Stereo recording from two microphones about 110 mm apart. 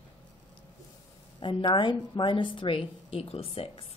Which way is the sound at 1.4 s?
45° left (ahead or behind).